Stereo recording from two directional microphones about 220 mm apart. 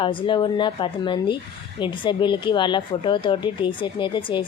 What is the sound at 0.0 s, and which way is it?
Speech, 20° left (ahead or behind).